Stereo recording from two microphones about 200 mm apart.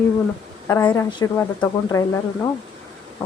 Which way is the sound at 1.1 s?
20° left (ahead or behind).